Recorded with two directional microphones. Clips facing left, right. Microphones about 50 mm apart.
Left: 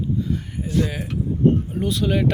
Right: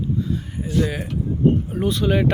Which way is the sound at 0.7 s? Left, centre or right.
Centre.